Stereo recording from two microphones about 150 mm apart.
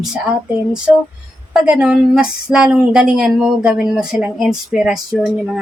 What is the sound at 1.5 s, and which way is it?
A woman's voice, 5° right (ahead or behind).